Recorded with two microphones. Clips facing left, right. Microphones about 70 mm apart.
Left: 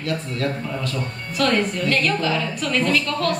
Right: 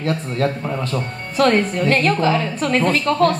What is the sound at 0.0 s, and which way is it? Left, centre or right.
A woman's voice, right.